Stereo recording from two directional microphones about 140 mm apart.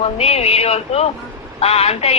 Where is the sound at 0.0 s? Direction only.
50° left (ahead or behind).